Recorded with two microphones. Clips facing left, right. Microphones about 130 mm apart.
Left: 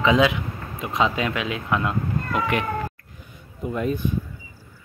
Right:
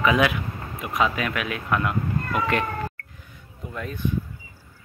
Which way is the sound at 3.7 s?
20° left (ahead or behind).